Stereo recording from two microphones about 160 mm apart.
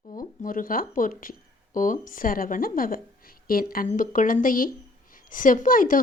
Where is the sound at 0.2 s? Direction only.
60° left (ahead or behind).